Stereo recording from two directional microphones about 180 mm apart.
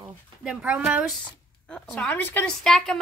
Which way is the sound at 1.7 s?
5° left (ahead or behind).